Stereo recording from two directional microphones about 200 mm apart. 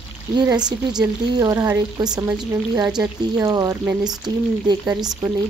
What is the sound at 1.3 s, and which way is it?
Speech, 20° right (ahead or behind).